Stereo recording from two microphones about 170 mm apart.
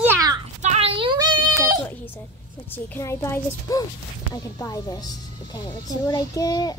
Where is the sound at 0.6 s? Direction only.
40° right (ahead or behind); by 1.8 s 25° right (ahead or behind).